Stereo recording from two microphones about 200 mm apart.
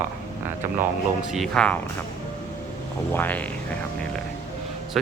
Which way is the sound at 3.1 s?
10° left (ahead or behind).